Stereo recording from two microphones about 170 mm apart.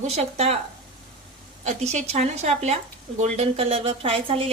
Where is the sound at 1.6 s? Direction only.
40° right (ahead or behind).